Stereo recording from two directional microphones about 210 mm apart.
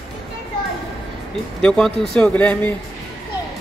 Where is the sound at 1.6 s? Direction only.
Centre (ahead or behind).